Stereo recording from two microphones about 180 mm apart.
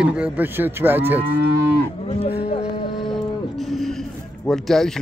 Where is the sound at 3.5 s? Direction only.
Centre (ahead or behind).